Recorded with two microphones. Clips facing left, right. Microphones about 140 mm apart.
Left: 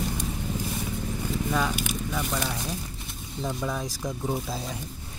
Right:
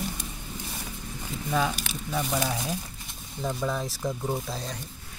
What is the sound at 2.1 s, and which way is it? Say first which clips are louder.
Speech: right 4 dB; 5° right (ahead or behind).